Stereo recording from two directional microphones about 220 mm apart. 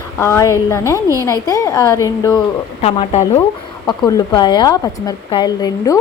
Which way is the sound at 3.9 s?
20° left (ahead or behind).